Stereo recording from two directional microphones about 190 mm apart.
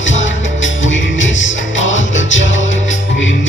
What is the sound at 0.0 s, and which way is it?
Music, 80° left.